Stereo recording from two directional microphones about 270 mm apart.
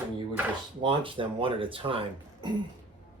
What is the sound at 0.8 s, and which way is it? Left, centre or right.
Speech, centre.